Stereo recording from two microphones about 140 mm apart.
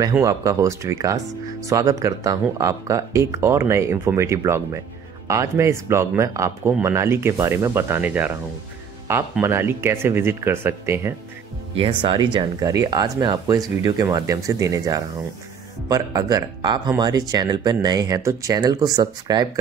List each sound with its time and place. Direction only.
0.2 s speech: 25° right (ahead or behind)
9.4 s speech: 15° right (ahead or behind)
11.7 s speech: 35° right (ahead or behind)